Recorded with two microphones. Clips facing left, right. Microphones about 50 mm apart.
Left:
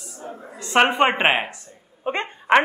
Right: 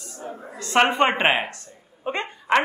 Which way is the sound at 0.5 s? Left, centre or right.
Centre.